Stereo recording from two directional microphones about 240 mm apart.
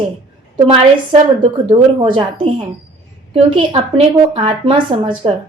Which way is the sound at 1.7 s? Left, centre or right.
Right.